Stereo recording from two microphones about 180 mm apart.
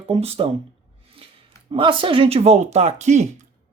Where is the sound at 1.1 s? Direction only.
30° right (ahead or behind).